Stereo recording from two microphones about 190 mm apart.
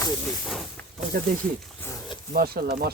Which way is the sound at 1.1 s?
50° right (ahead or behind).